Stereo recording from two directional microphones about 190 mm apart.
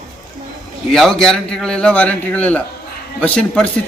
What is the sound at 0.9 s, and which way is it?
A man's voice, centre (ahead or behind).